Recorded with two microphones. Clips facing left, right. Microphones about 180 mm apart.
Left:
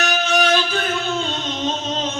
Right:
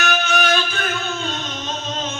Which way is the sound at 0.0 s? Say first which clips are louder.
Left 2 dB; 35° left (ahead or behind).